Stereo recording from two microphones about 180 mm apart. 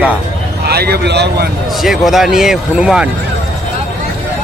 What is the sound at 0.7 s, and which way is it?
Speech, 65° right (ahead or behind).